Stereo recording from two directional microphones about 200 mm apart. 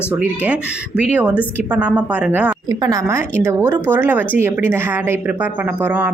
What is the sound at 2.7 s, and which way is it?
A woman's voice, 15° right (ahead or behind).